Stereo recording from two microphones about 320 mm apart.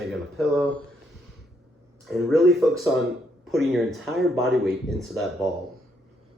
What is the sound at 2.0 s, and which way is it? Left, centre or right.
Speech, centre.